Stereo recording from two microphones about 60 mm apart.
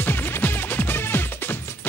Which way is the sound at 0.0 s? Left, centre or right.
Left.